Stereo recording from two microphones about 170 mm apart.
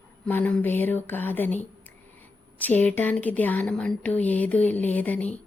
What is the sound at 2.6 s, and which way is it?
A woman's voice, 10° left (ahead or behind).